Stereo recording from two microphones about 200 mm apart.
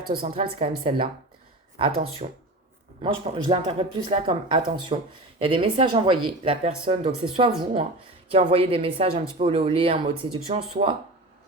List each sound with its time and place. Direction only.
0.6 s speech: 25° right (ahead or behind)